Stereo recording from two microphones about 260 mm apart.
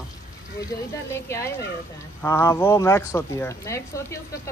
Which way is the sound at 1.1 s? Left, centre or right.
Centre.